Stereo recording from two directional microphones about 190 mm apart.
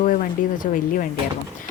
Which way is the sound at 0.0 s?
45° left (ahead or behind).